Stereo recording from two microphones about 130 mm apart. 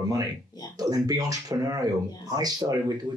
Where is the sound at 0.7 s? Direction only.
30° right (ahead or behind).